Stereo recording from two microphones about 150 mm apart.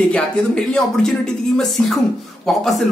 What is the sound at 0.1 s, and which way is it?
Speech, 5° left (ahead or behind).